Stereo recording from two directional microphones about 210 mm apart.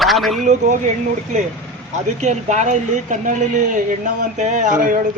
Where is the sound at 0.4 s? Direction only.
35° right (ahead or behind).